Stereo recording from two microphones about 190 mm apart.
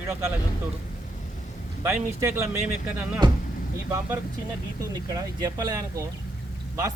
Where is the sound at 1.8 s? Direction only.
15° right (ahead or behind).